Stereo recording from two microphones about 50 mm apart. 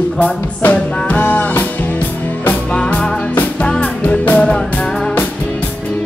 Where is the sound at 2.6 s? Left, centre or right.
Centre.